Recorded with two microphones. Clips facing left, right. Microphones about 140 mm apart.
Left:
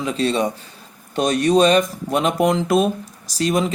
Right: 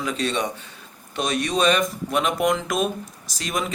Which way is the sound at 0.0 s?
30° left (ahead or behind).